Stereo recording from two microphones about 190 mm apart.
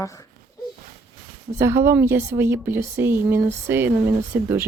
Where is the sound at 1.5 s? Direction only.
15° right (ahead or behind).